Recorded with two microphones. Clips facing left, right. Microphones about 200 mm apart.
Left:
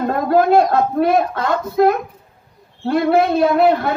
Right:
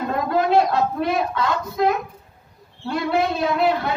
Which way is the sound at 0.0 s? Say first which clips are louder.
Left 6 dB; 50° left (ahead or behind).